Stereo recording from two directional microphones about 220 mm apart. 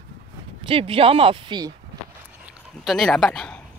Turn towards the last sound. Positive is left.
turn(degrees=5)  # may be behind; listen again after turning